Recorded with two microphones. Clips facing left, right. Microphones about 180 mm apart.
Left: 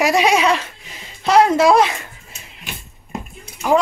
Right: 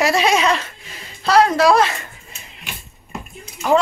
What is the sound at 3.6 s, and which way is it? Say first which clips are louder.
Speech: even; 10° left (ahead or behind).